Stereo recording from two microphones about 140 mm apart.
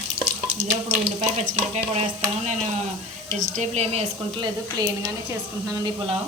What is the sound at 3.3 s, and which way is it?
Speech, 60° right (ahead or behind).